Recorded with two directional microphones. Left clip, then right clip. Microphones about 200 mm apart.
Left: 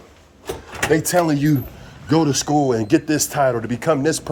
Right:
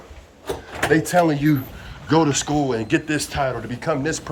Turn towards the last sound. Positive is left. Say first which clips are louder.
# left 5 dB
turn(degrees=50)  # may be behind; listen again after turning